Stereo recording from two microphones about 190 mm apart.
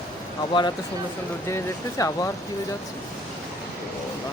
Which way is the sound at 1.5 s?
15° left (ahead or behind).